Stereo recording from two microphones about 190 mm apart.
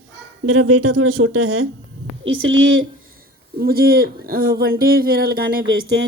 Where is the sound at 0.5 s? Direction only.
90° right.